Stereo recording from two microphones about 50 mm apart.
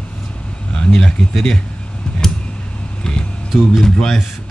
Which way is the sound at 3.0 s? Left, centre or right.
Centre.